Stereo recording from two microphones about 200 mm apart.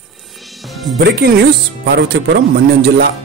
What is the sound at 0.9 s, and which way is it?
Speech, 55° right (ahead or behind).